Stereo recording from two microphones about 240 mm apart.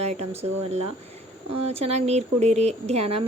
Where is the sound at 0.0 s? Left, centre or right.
Right.